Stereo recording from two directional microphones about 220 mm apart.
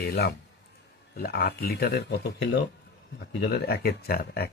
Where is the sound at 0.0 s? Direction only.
45° left (ahead or behind).